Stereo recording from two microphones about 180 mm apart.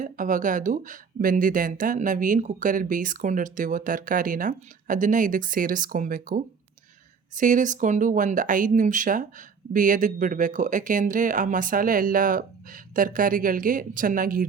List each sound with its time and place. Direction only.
0.0 s speech: 45° right (ahead or behind)